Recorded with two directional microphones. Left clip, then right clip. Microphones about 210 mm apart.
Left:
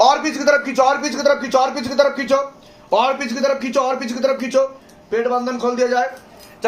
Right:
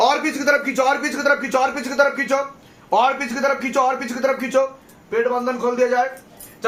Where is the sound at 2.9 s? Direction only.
15° right (ahead or behind).